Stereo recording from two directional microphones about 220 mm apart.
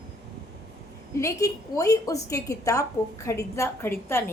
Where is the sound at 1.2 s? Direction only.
15° left (ahead or behind).